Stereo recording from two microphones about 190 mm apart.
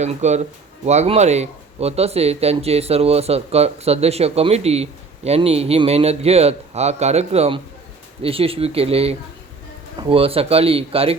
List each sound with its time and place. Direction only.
0.0 s speech: 35° right (ahead or behind)